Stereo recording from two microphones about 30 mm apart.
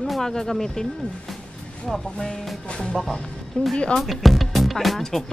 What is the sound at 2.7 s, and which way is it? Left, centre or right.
Speech, left.